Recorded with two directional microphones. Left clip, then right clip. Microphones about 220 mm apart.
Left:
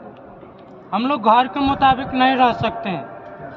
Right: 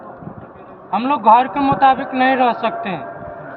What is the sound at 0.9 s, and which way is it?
Mantra, 20° left (ahead or behind).